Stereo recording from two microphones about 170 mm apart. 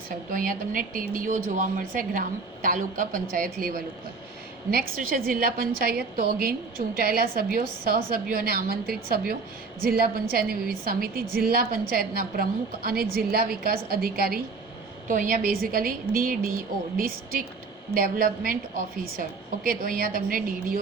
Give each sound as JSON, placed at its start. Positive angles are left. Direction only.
{"t": 0.3, "sound": "a woman's voice", "side_deg": -55}
{"t": 15.0, "sound": "a woman's voice", "side_deg": -50}
{"t": 17.9, "sound": "a woman's voice", "side_deg": -55}
{"t": 19.6, "sound": "a woman's voice", "side_deg": -55}